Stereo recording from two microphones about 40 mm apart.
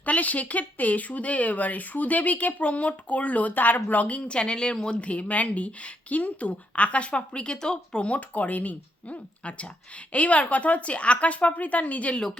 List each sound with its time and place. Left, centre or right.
0.0 s speech: left
8.0 s speech: left